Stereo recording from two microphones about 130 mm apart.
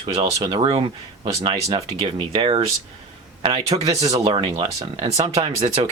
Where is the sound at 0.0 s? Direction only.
40° right (ahead or behind).